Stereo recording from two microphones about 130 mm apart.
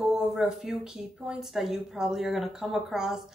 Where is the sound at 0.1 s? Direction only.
5° right (ahead or behind).